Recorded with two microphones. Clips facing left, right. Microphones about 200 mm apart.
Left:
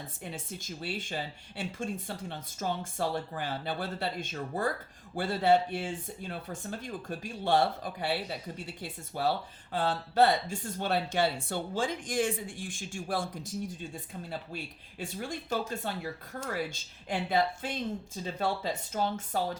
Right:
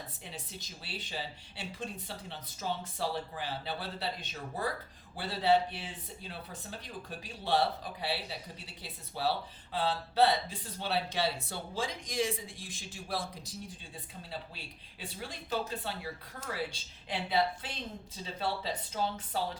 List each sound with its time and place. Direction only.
0.3 s speech: 50° left (ahead or behind)